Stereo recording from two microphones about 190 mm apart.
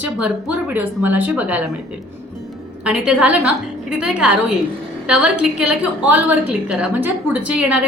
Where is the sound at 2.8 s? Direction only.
5° right (ahead or behind).